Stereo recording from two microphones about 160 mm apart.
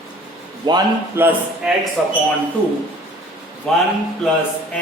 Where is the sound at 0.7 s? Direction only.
30° right (ahead or behind).